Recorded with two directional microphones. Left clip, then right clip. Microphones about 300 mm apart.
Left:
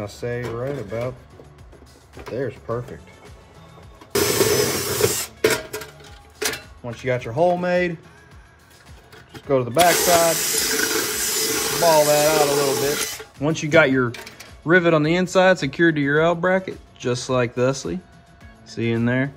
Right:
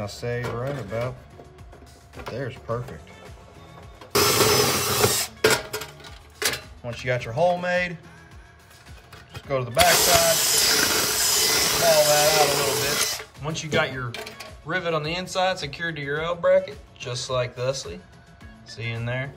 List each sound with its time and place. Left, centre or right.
0.0 s speech: centre
2.2 s speech: centre
4.1 s printer: centre
6.8 s speech: centre
9.8 s hiss: centre
12.4 s speech: centre
13.5 s speech: centre